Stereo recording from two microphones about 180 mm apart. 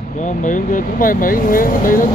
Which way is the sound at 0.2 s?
45° left (ahead or behind).